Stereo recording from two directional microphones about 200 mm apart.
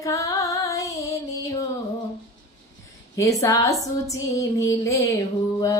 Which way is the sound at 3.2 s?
15° left (ahead or behind).